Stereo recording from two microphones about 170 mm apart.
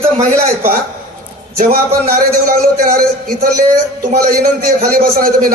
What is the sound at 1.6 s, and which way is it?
A man's voice, 60° right (ahead or behind).